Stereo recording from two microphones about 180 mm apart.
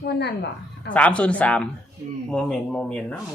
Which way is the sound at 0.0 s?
65° left (ahead or behind).